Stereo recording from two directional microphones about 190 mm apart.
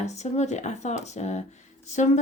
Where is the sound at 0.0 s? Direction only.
35° left (ahead or behind).